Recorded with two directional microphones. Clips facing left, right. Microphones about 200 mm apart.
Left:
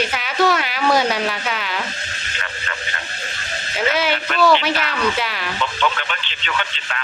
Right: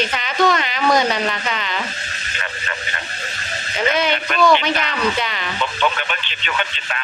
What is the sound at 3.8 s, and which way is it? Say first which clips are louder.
Speech: right 1 dB; 5° left (ahead or behind).